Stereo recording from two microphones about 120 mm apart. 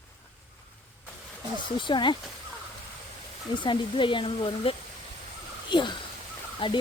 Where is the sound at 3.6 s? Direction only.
45° left (ahead or behind).